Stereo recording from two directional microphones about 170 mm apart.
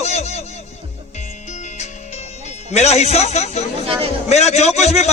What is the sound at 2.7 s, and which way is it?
A man's voice, 40° left (ahead or behind).